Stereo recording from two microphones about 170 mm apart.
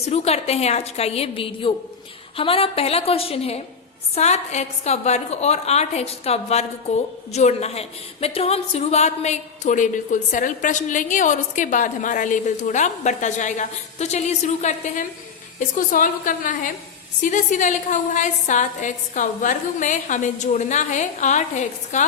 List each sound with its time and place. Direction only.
0.0 s a woman's voice: 40° left (ahead or behind)